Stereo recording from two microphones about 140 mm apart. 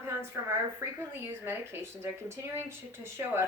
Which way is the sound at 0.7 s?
15° right (ahead or behind).